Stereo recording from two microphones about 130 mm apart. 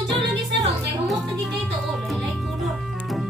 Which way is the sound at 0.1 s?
Centre (ahead or behind).